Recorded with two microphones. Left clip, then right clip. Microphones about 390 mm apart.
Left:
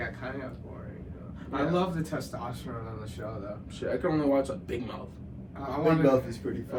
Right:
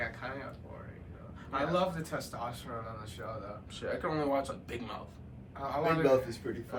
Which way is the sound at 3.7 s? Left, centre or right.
Centre.